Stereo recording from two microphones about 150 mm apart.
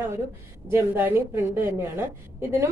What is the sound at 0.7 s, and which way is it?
A woman's voice, 15° right (ahead or behind).